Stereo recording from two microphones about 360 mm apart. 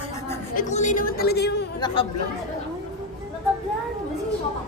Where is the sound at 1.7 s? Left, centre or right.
Centre.